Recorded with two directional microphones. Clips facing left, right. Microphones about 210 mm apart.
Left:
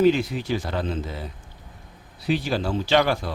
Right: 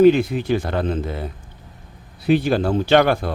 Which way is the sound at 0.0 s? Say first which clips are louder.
Right 6 dB; 55° right (ahead or behind).